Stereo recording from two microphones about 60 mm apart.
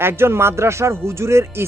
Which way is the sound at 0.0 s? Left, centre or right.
Right.